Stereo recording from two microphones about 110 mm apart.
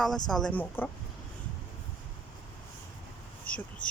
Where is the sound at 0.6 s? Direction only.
15° left (ahead or behind).